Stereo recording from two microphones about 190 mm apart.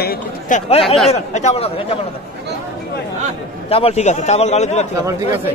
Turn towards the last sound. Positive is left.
turn(degrees=-15)  # may be behind; listen again after turning